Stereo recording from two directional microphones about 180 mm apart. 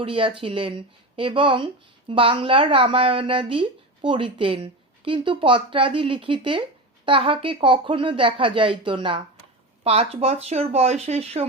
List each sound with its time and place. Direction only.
0.0 s speech: 30° right (ahead or behind)